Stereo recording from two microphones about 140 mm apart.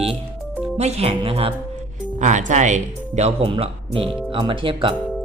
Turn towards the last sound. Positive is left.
turn(degrees=-40)  # may be behind; listen again after turning